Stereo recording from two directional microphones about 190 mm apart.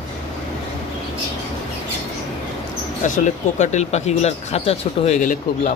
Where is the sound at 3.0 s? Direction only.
40° left (ahead or behind).